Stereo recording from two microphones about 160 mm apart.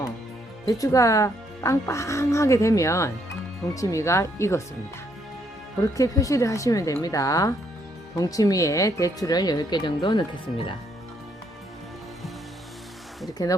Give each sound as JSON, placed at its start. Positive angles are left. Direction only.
{"t": 0.6, "sound": "speech", "side_deg": 20}
{"t": 5.8, "sound": "speech", "side_deg": 20}
{"t": 13.4, "sound": "speech", "side_deg": 20}